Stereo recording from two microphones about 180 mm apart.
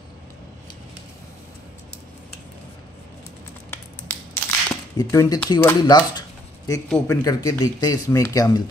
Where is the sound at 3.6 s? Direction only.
10° left (ahead or behind).